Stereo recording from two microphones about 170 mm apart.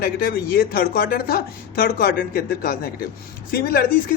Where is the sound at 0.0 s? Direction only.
60° left (ahead or behind).